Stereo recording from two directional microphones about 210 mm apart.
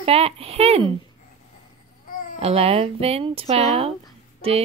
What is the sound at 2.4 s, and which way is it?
A woman's voice, 25° right (ahead or behind).